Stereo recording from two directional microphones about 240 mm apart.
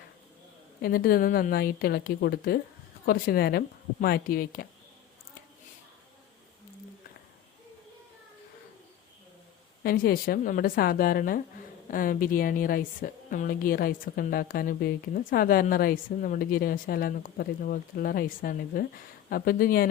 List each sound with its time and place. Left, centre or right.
0.8 s a woman's voice: left
9.8 s a woman's voice: left